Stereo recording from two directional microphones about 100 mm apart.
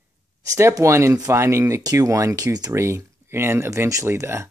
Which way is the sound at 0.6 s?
30° right (ahead or behind).